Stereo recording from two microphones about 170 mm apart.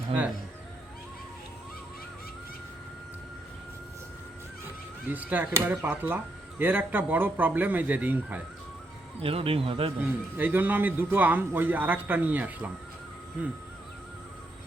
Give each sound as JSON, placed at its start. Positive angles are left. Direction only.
{"t": 5.0, "sound": "speech", "side_deg": -10}
{"t": 9.2, "sound": "speech", "side_deg": -35}
{"t": 10.3, "sound": "speech", "side_deg": -10}